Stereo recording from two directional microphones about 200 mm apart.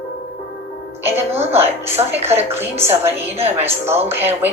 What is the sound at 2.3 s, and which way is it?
A woman's voice, 10° right (ahead or behind).